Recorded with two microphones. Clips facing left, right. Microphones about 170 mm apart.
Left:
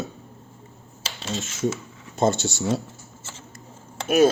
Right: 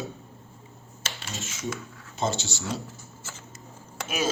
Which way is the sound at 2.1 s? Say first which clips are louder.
Left 7 dB; 55° left (ahead or behind).